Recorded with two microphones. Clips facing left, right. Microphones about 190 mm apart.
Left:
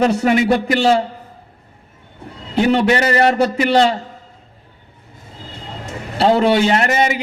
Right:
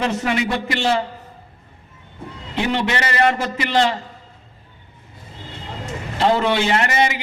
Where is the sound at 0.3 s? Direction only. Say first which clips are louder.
Left 7 dB; 45° left (ahead or behind).